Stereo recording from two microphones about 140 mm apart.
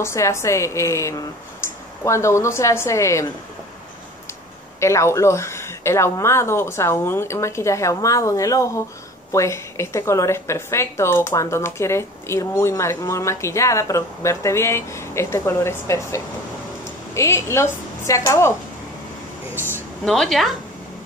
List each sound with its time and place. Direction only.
0.0 s a woman's voice: 20° left (ahead or behind)
4.7 s a woman's voice: 20° left (ahead or behind)
19.5 s a woman's voice: 15° right (ahead or behind)
20.1 s speech: centre (ahead or behind)